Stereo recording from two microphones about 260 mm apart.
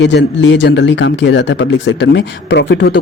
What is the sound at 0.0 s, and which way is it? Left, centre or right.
Speech, left.